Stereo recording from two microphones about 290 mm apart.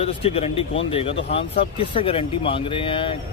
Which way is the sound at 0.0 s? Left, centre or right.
Left.